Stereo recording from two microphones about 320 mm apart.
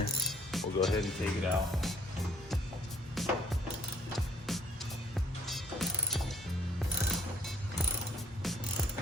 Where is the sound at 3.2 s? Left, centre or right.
Centre.